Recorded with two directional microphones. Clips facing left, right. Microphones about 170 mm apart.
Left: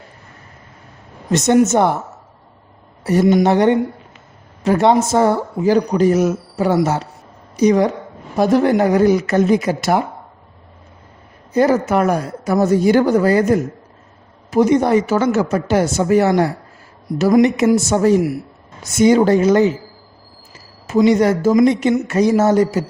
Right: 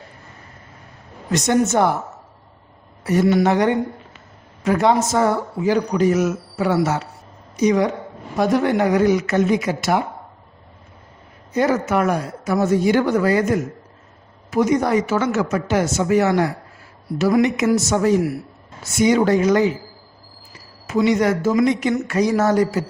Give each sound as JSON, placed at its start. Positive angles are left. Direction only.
{"t": 1.3, "sound": "speech", "side_deg": 25}
{"t": 3.0, "sound": "speech", "side_deg": 30}
{"t": 11.5, "sound": "speech", "side_deg": 35}
{"t": 17.8, "sound": "speech", "side_deg": 35}
{"t": 20.9, "sound": "speech", "side_deg": 35}